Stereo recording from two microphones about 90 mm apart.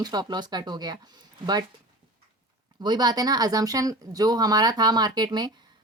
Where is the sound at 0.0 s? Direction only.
50° right (ahead or behind).